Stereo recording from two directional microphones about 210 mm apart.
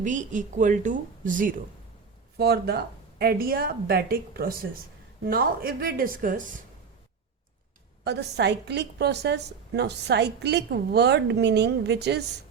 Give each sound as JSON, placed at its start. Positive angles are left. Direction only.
{"t": 0.0, "sound": "speech", "side_deg": -35}
{"t": 2.4, "sound": "a woman's voice", "side_deg": -50}
{"t": 8.0, "sound": "a woman's voice", "side_deg": -55}